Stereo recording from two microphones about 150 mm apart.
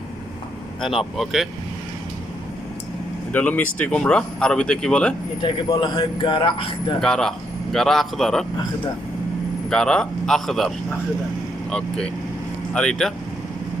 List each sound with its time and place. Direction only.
1.1 s speech: centre (ahead or behind)
3.3 s speech: 10° left (ahead or behind)
5.4 s speech: 30° left (ahead or behind)
7.0 s speech: 5° left (ahead or behind)
9.6 s speech: 5° left (ahead or behind)
11.7 s speech: 5° left (ahead or behind)